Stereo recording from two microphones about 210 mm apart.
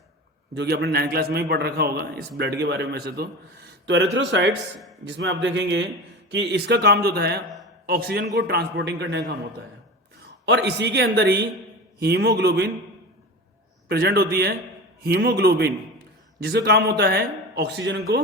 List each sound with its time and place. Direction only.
0.5 s a man's voice: 55° right (ahead or behind)
10.4 s a man's voice: 55° right (ahead or behind)
13.8 s a man's voice: 50° right (ahead or behind)